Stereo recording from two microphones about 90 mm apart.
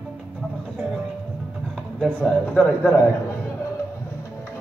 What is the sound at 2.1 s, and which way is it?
Speech, 10° left (ahead or behind).